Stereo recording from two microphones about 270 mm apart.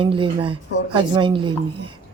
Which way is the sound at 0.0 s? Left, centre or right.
Centre.